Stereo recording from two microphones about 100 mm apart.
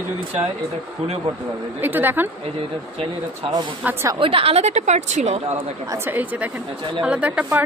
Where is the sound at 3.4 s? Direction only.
45° right (ahead or behind).